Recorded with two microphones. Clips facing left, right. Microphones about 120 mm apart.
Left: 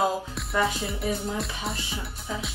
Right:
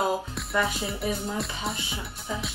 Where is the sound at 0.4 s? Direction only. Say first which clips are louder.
Left 1 dB; centre (ahead or behind).